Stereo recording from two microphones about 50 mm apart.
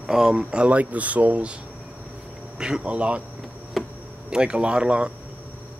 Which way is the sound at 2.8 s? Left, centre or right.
Right.